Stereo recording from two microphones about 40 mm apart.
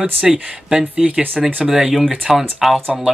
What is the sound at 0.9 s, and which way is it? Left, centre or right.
Speech, right.